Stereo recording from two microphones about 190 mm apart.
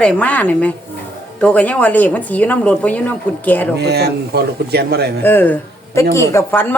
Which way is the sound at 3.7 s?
60° right (ahead or behind).